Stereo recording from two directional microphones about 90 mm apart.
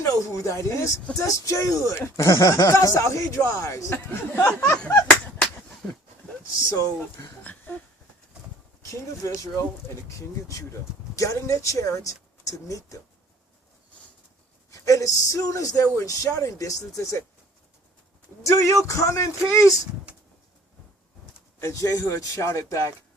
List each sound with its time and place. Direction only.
0.0 s speech: 35° left (ahead or behind)
3.9 s speech: 20° left (ahead or behind)
6.7 s speech: 40° left (ahead or behind)
8.8 s speech: 35° left (ahead or behind)
14.7 s speech: 35° left (ahead or behind)
18.4 s speech: 35° left (ahead or behind)
20.1 s bird: 15° right (ahead or behind)
21.6 s speech: 35° left (ahead or behind)